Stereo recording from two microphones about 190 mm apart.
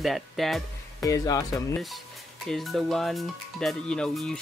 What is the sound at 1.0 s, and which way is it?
Speech, 20° left (ahead or behind).